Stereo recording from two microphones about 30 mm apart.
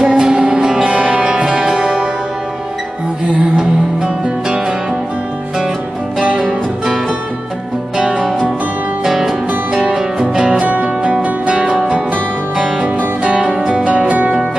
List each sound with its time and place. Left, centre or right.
0.0 s music: right
0.9 s music: right
1.2 s music: right
3.5 s music: right
8.0 s music: right
10.3 s music: centre
10.6 s music: right
12.5 s music: right
13.5 s music: right
13.8 s music: right